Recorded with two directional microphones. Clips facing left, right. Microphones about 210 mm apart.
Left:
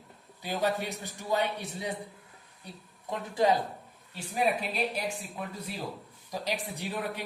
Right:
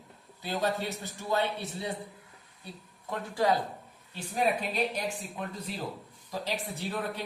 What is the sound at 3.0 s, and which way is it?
Speech, 20° left (ahead or behind).